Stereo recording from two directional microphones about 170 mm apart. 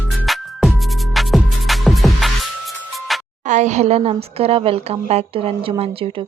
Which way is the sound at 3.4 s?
45° right (ahead or behind).